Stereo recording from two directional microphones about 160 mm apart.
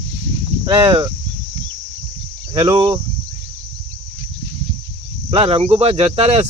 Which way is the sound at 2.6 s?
30° right (ahead or behind).